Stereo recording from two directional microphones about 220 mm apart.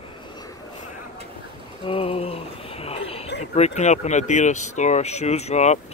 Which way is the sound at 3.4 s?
30° left (ahead or behind).